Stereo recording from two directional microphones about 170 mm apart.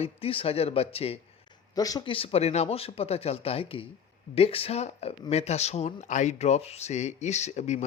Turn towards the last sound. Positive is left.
turn(degrees=40)  # may be behind; listen again after turning